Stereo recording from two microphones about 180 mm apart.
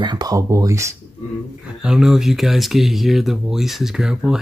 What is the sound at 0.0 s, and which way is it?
Speech, 25° right (ahead or behind).